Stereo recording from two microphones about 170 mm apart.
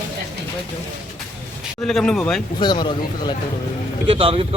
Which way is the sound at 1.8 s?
5° left (ahead or behind).